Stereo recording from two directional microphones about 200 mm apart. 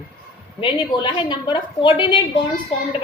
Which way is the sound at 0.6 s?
25° left (ahead or behind).